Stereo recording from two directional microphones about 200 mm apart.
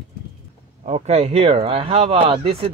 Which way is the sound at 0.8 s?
30° right (ahead or behind).